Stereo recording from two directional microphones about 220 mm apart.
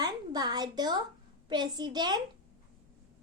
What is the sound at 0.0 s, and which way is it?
A woman's voice, 20° right (ahead or behind).